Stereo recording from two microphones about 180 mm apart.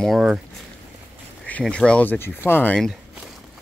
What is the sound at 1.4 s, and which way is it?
Speech, 5° left (ahead or behind).